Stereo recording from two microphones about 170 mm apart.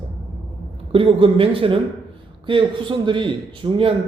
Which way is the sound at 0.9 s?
30° right (ahead or behind).